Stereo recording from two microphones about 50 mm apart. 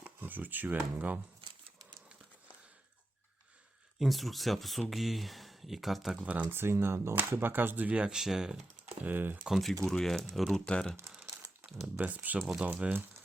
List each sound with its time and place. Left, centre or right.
0.0 s speech: right
4.0 s speech: centre
6.1 s speech: right
6.4 s speech: right
7.3 s speech: right
7.9 s speech: right
8.1 s speech: centre
9.0 s speech: right
9.6 s speech: centre
10.7 s speech: centre
11.9 s speech: right